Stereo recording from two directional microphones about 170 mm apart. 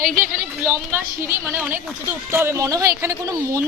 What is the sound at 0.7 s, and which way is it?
A woman's voice, 15° right (ahead or behind).